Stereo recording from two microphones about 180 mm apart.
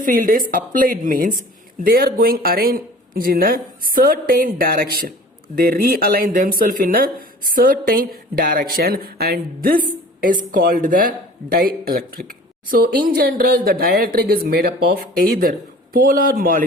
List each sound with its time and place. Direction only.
0.0 s speech: 50° right (ahead or behind)